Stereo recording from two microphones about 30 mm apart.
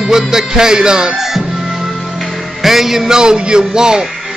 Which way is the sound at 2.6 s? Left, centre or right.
Centre.